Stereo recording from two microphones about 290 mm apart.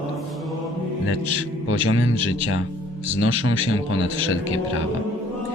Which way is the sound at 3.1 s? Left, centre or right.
Centre.